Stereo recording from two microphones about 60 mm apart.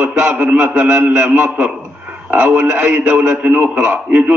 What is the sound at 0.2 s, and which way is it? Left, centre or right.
A man's voice, right.